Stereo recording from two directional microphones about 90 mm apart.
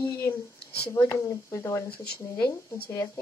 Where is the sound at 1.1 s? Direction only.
35° left (ahead or behind).